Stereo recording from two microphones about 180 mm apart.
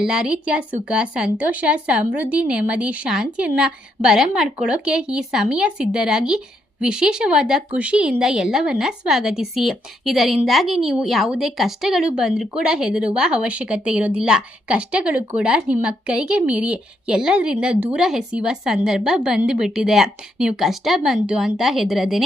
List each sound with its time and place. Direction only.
0.0 s a woman's voice: 5° right (ahead or behind)